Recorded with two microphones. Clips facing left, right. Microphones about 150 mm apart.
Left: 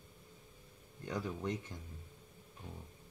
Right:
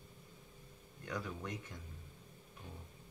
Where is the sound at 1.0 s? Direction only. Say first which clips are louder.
Left 4 dB; 25° left (ahead or behind).